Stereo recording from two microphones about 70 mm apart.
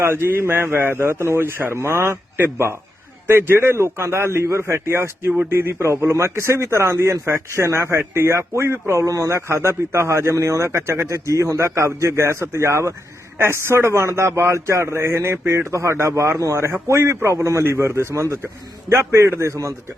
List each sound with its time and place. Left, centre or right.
0.0 s a man's voice: right